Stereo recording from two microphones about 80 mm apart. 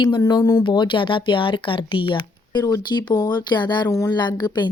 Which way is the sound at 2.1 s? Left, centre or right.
Left.